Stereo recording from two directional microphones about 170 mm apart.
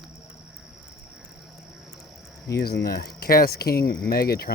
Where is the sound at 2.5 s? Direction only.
70° left (ahead or behind).